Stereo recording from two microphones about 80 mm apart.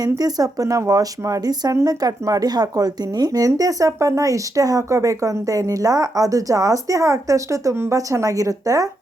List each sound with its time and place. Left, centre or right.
0.2 s speech: right